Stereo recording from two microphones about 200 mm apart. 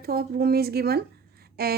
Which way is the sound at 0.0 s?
50° right (ahead or behind).